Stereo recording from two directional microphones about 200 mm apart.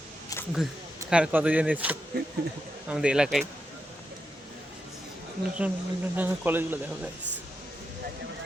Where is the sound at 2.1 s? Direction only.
50° right (ahead or behind).